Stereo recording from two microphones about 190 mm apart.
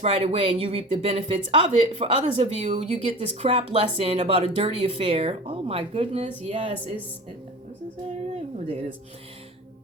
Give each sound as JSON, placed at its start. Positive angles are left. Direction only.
{"t": 0.0, "sound": "speech", "side_deg": -30}
{"t": 8.5, "sound": "speech", "side_deg": -30}